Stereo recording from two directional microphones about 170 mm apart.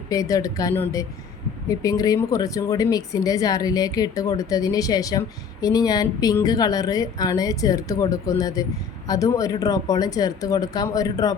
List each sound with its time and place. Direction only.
0.1 s speech: 20° left (ahead or behind)